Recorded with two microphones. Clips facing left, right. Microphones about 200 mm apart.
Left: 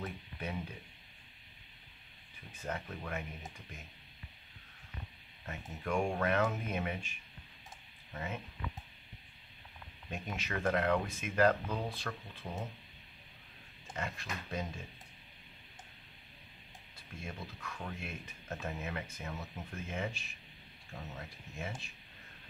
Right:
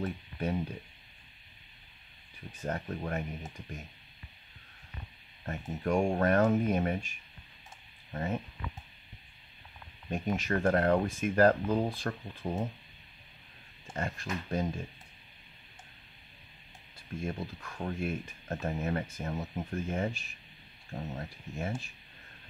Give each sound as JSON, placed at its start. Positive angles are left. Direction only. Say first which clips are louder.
{"t": 0.0, "sound": "a sound", "louder": "right 7 dB", "side_deg": -40}
{"t": 2.6, "sound": "speech", "louder": "right 6 dB", "side_deg": -40}
{"t": 5.4, "sound": "speech", "louder": "right 8 dB", "side_deg": -45}
{"t": 10.0, "sound": "speech", "louder": "right 9 dB", "side_deg": -45}
{"t": 13.9, "sound": "speech", "louder": "right 6 dB", "side_deg": -50}
{"t": 17.2, "sound": "speech", "louder": "right 8 dB", "side_deg": -45}